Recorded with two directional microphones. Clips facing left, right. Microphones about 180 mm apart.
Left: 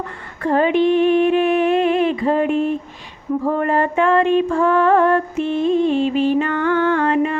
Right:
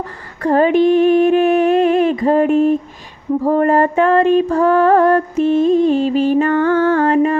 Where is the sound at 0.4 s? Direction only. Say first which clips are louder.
Right 3 dB; 40° right (ahead or behind).